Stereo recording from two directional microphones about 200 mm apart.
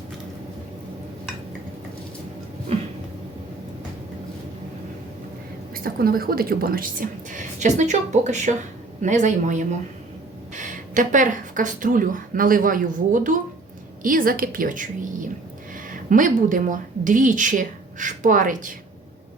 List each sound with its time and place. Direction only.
5.7 s a woman's voice: 45° right (ahead or behind)
15.9 s a woman's voice: 40° right (ahead or behind)